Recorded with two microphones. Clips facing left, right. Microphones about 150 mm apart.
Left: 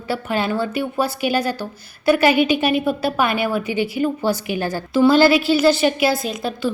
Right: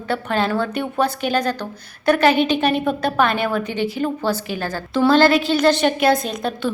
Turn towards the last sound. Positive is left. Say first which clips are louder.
# even
turn(degrees=5)  # may be behind; listen again after turning